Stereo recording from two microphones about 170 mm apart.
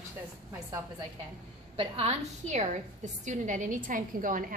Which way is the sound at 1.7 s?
35° right (ahead or behind).